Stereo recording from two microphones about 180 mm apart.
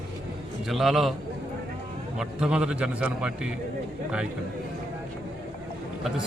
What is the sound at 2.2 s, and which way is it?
A man's voice, 5° right (ahead or behind).